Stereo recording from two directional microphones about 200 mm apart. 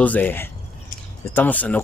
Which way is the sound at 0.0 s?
10° left (ahead or behind).